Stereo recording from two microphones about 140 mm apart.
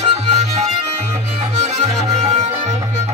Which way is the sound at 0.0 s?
50° right (ahead or behind).